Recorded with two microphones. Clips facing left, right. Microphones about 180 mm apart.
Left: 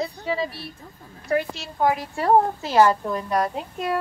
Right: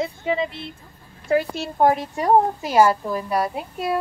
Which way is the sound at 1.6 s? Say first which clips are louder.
Right 4 dB; 50° right (ahead or behind).